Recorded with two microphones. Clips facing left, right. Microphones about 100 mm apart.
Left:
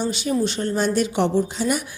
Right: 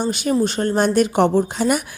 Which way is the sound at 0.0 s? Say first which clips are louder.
Right 3 dB; 50° right (ahead or behind).